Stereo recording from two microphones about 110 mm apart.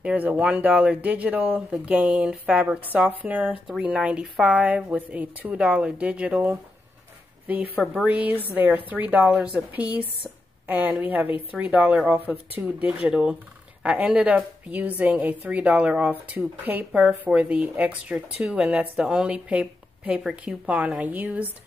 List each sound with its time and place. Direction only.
0.0 s speech: 10° right (ahead or behind)